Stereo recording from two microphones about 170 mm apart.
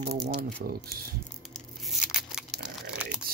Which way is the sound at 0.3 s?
60° right (ahead or behind).